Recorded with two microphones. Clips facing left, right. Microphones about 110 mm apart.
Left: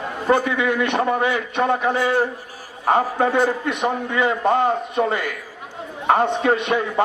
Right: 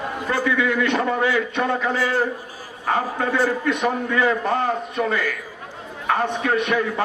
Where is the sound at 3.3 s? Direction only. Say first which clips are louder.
Left 1 dB; 20° left (ahead or behind).